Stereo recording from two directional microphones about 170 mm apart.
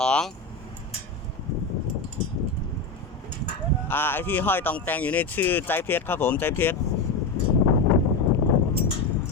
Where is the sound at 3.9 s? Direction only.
10° left (ahead or behind).